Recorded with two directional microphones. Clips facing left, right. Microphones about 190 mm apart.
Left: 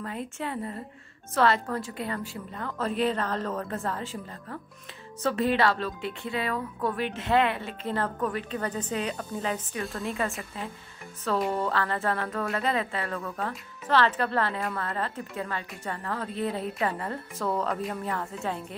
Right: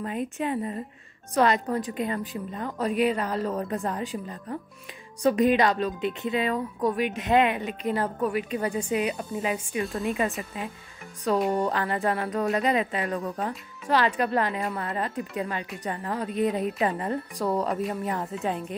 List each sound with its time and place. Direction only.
0.0 s speech: 20° right (ahead or behind)